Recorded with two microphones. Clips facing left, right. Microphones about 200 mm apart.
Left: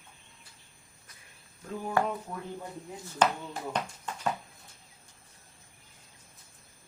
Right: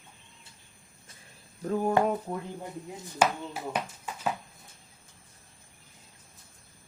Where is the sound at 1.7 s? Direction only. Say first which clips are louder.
Right 9 dB; 50° right (ahead or behind).